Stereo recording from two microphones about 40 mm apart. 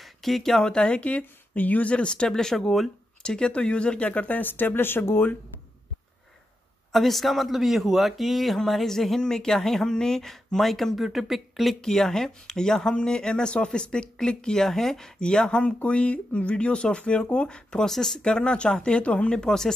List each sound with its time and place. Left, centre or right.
0.2 s speech: centre; by 1.2 s left
1.5 s speech: left
2.3 s speech: centre
3.2 s speech: left
6.9 s speech: centre
11.8 s speech: centre
15.1 s speech: left
17.8 s speech: centre
18.2 s speech: left
19.3 s speech: centre